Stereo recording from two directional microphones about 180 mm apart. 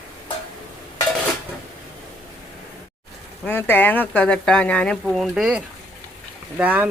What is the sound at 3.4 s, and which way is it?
Speech, 10° left (ahead or behind).